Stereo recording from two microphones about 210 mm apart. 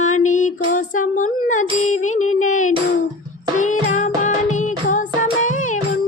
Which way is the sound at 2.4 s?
35° left (ahead or behind).